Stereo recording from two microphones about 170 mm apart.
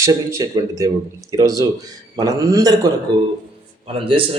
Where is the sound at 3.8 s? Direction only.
30° right (ahead or behind).